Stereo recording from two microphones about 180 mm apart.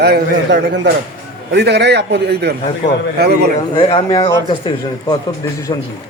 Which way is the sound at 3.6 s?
25° left (ahead or behind).